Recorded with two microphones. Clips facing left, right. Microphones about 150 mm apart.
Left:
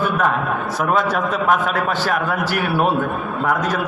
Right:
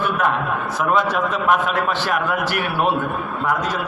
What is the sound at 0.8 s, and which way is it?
A man's voice, 40° left (ahead or behind).